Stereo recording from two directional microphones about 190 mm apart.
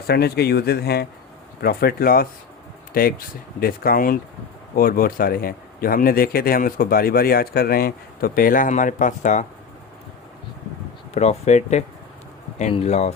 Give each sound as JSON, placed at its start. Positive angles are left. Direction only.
{"t": 0.1, "sound": "speech", "side_deg": 55}
{"t": 11.1, "sound": "speech", "side_deg": 35}